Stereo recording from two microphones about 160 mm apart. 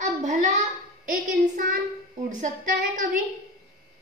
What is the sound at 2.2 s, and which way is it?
Speech, 50° right (ahead or behind).